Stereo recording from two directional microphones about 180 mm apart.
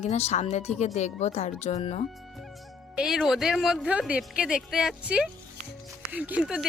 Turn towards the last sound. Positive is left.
turn(degrees=-5)  # may be behind; listen again after turning